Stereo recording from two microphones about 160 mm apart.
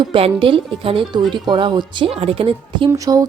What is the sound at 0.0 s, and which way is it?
Speech, 35° right (ahead or behind).